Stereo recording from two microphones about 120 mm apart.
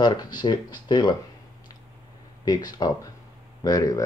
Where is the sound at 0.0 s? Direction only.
35° left (ahead or behind).